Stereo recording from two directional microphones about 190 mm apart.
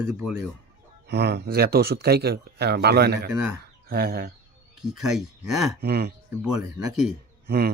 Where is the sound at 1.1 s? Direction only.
60° right (ahead or behind).